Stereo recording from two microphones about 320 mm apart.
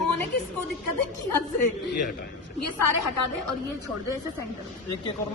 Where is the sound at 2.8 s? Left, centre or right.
Left.